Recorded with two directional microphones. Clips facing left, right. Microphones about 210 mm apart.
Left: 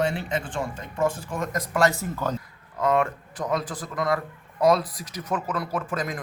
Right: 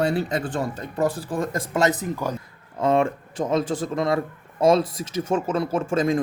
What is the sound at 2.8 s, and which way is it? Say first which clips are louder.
A man's voice: right 3 dB; 25° right (ahead or behind).